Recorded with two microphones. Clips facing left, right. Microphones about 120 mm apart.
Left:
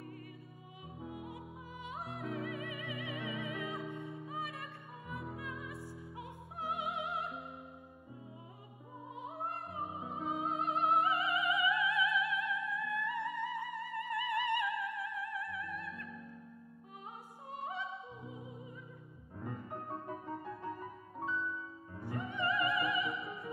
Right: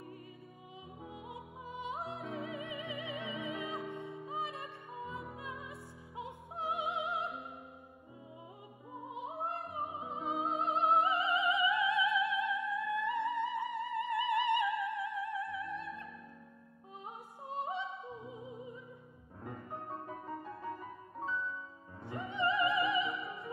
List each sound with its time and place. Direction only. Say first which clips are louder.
1.0 s music: left 3 dB; 25° right (ahead or behind)
6.1 s opera: right 8 dB; 25° right (ahead or behind)
9.1 s music: right 2 dB; 20° right (ahead or behind)
17.5 s opera: right 4 dB; 25° right (ahead or behind)
18.2 s music: right 2 dB; 25° right (ahead or behind)
19.4 s music: left 1 dB; centre (ahead or behind)
22.0 s opera: right 2 dB; 25° right (ahead or behind)
23.0 s music: right 1 dB; centre (ahead or behind)